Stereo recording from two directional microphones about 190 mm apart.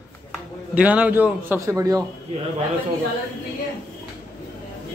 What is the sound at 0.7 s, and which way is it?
A man's voice, 5° right (ahead or behind).